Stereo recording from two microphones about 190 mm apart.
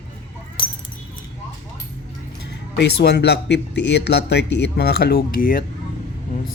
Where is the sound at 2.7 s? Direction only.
60° left (ahead or behind).